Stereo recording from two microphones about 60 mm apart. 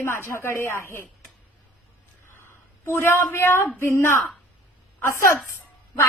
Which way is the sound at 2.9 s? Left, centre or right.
Left.